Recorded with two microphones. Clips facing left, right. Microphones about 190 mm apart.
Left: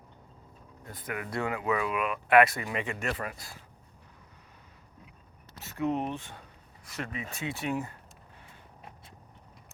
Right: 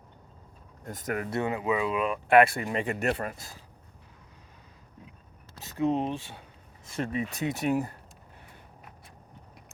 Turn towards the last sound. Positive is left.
turn(degrees=-35)  # may be behind; listen again after turning